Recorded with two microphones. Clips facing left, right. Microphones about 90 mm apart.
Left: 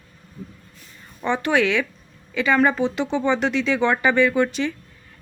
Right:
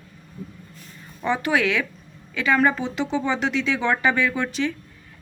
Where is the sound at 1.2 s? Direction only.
5° right (ahead or behind).